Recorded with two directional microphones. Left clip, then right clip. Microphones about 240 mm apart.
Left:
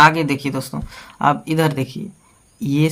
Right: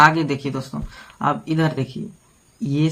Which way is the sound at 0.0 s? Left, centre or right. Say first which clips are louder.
Left 2 dB; left.